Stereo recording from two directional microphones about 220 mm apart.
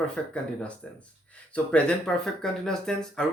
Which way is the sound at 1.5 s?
5° left (ahead or behind).